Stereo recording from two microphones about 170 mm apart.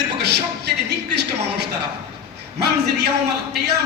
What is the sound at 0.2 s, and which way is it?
Speech, 75° right (ahead or behind).